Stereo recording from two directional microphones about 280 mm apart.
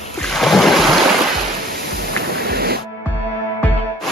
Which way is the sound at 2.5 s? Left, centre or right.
Right.